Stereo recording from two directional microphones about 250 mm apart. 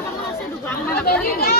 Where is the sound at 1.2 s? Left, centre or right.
Left.